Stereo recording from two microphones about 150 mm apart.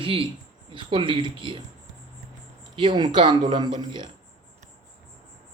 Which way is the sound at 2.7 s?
35° right (ahead or behind).